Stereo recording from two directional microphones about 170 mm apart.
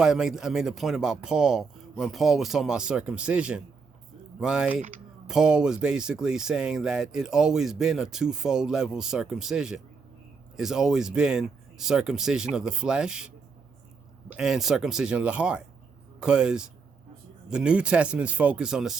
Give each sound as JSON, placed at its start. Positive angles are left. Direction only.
{"t": 0.0, "sound": "speech", "side_deg": -5}
{"t": 14.3, "sound": "speech", "side_deg": 0}